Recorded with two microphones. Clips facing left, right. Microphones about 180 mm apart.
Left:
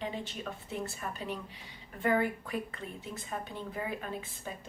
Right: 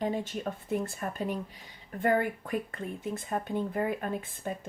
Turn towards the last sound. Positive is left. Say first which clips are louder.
# right 6 dB
turn(degrees=-50)  # may be behind; listen again after turning